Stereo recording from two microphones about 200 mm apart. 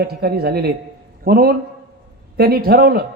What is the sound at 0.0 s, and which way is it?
A man's voice, 50° right (ahead or behind).